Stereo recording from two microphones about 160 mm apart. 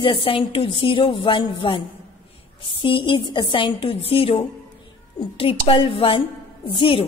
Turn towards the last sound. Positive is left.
turn(degrees=35)  # may be behind; listen again after turning